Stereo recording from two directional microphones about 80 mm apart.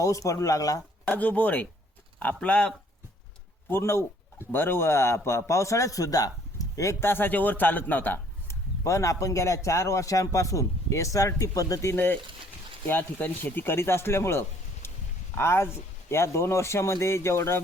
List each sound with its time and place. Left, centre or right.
0.0 s speech: left
1.0 s speech: centre
3.7 s a man's voice: left
7.0 s speech: left
8.8 s a man's voice: left
11.9 s a man's voice: left